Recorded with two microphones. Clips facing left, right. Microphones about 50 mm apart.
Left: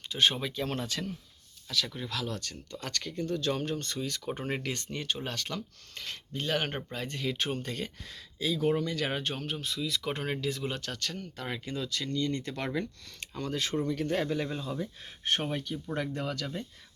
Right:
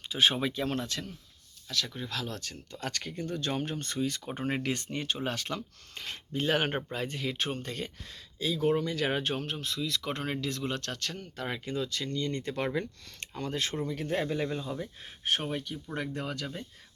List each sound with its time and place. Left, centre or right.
0.1 s speech: centre
16.0 s speech: centre